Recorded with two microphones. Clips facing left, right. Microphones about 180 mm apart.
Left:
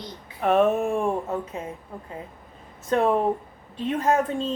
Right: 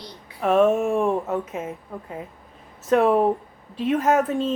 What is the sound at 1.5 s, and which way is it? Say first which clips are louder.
Speech: right 3 dB; 20° right (ahead or behind).